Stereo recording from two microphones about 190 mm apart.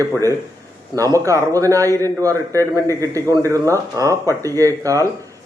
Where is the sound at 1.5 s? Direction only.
15° right (ahead or behind).